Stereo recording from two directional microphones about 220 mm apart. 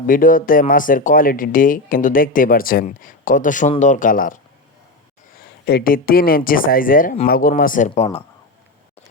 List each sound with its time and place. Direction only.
0.1 s speech: 40° left (ahead or behind)
5.4 s speech: 45° left (ahead or behind); by 8.2 s 30° left (ahead or behind)